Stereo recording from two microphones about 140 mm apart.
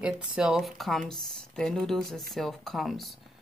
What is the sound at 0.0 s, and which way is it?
Speech, 5° right (ahead or behind).